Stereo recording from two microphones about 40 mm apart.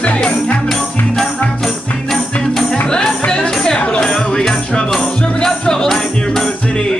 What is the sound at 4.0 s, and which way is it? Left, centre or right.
Speech, centre.